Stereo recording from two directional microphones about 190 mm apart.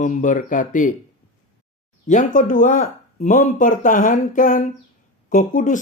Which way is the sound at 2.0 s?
40° left (ahead or behind).